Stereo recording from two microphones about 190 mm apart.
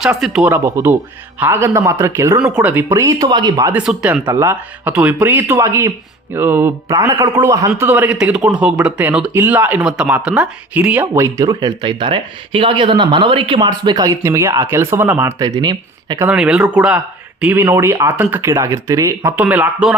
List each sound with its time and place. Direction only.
0.0 s speech: 5° right (ahead or behind); by 3.7 s 20° right (ahead or behind)
3.7 s speech: 10° right (ahead or behind)
16.2 s speech: 5° right (ahead or behind)